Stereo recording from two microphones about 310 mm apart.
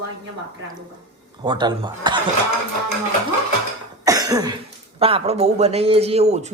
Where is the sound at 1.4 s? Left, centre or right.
Centre.